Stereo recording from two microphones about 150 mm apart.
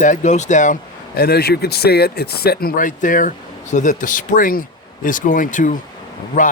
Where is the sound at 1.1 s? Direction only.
90° left.